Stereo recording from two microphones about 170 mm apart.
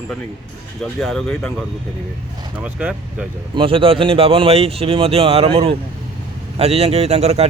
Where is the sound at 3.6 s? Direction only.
30° right (ahead or behind).